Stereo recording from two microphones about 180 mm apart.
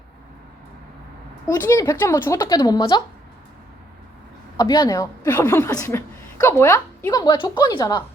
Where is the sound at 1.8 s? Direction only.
20° left (ahead or behind).